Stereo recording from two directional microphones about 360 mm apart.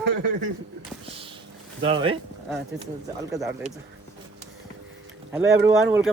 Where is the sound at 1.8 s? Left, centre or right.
Centre.